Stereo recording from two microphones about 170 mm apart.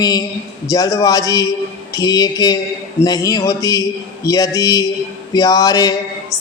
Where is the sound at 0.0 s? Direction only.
25° left (ahead or behind).